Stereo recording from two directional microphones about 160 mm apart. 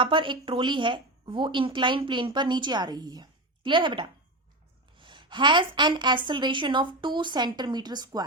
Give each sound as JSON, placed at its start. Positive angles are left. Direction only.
{"t": 0.0, "sound": "a woman's voice", "side_deg": -30}